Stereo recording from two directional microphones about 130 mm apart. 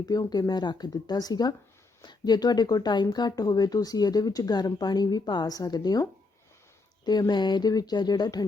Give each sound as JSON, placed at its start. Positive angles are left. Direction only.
{"t": 0.0, "sound": "speech", "side_deg": 30}